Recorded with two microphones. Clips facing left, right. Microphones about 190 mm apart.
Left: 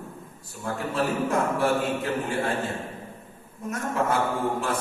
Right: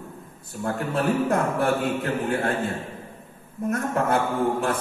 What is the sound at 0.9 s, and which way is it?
A man's voice, 55° right (ahead or behind).